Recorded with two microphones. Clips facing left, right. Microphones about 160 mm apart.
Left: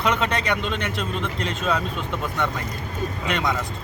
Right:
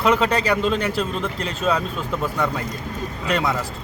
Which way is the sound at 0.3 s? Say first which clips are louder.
Right 4 dB; 35° right (ahead or behind).